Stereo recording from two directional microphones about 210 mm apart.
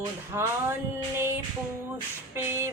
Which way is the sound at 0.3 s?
10° right (ahead or behind).